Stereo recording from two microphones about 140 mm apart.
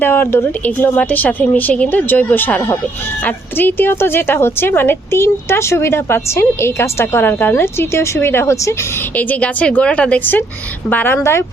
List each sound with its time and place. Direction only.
0.0 s a woman's voice: 15° left (ahead or behind)